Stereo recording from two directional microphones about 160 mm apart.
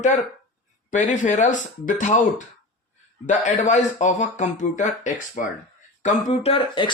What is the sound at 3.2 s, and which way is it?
Speech, 50° left (ahead or behind).